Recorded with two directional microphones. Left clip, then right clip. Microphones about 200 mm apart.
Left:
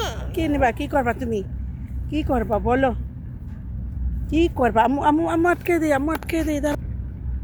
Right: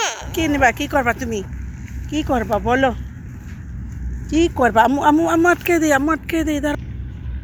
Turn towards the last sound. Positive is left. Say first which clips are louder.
# right 3 dB
turn(degrees=0)  # may be behind; listen again after turning